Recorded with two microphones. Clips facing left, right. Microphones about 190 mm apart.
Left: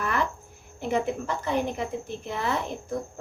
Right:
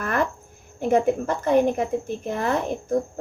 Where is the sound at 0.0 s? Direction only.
50° right (ahead or behind).